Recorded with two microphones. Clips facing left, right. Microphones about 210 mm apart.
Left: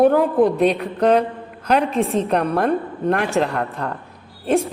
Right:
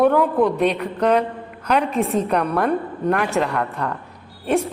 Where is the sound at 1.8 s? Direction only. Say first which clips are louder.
Left 1 dB; 5° right (ahead or behind).